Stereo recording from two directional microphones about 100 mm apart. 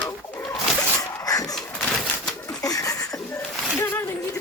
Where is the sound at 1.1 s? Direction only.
35° left (ahead or behind).